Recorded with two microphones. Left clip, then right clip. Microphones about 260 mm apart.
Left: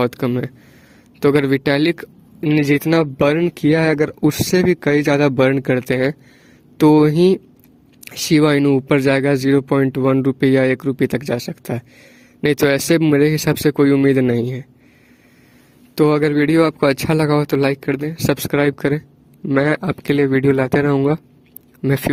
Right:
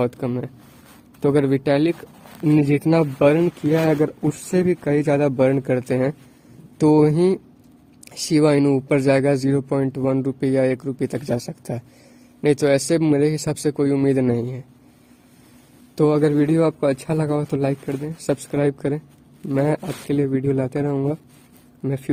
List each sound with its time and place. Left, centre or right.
0.0 s speech: left
16.0 s speech: left